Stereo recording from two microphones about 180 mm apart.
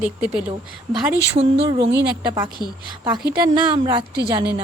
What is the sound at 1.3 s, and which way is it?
Speech, 30° right (ahead or behind).